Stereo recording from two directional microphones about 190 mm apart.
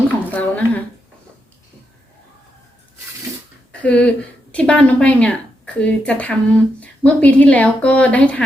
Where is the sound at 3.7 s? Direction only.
5° left (ahead or behind).